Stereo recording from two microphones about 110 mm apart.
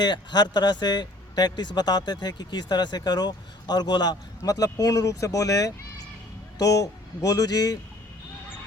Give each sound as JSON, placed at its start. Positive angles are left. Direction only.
{"t": 0.0, "sound": "speech", "side_deg": 40}